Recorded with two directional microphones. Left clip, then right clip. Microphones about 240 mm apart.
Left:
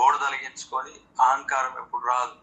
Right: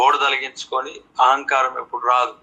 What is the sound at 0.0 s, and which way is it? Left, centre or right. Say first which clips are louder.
A man's voice: right 5 dB; right.